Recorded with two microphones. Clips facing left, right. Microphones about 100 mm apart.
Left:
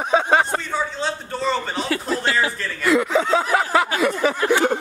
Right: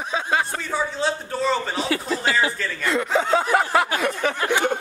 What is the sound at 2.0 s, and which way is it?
Snicker, centre (ahead or behind).